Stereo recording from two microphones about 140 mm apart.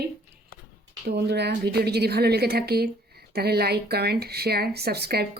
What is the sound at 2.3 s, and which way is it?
Speech, 90° right.